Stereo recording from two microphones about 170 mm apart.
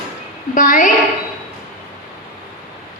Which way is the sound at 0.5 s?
50° left (ahead or behind).